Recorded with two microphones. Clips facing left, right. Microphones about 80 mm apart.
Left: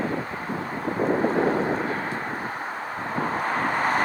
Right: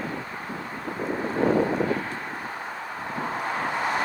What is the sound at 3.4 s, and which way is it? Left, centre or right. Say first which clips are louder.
Vehicle: left 2 dB; left.